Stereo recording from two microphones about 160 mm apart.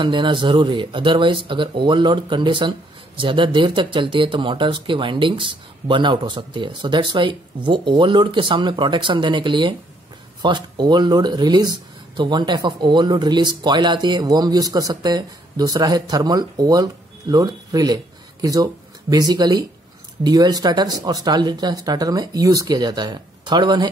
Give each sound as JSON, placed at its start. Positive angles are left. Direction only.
{"t": 0.0, "sound": "speech", "side_deg": -30}